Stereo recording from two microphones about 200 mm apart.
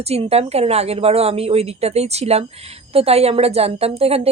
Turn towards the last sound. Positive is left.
turn(degrees=-30)  # may be behind; listen again after turning